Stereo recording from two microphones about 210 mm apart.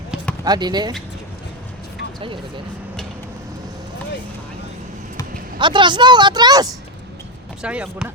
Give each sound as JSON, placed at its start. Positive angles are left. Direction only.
{"t": 0.4, "sound": "a woman's voice", "side_deg": -20}
{"t": 5.5, "sound": "a woman's voice", "side_deg": -20}
{"t": 7.6, "sound": "speech", "side_deg": -5}